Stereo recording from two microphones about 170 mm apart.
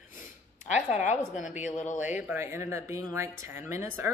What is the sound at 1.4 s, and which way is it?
Speech, 45° left (ahead or behind).